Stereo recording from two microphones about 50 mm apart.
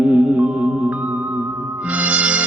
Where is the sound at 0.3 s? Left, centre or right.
Right.